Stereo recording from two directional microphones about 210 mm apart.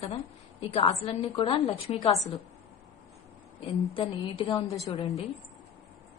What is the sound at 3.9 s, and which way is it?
Speech, 25° left (ahead or behind).